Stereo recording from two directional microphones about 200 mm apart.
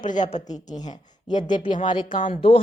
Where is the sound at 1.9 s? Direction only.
25° left (ahead or behind).